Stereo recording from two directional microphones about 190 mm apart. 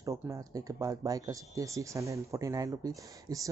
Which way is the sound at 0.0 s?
15° right (ahead or behind).